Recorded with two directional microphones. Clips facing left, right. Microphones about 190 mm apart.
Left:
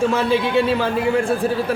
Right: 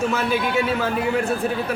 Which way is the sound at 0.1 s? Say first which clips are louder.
Left 4 dB; 30° left (ahead or behind).